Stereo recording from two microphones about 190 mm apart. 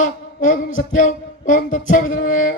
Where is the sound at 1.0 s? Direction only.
40° left (ahead or behind).